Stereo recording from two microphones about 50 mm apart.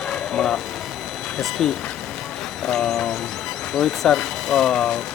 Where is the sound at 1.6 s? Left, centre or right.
Centre.